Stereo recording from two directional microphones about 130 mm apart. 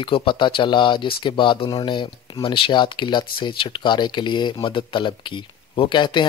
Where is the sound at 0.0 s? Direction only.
40° left (ahead or behind).